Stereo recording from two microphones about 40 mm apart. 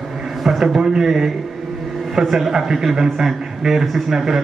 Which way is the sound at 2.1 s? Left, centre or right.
Centre.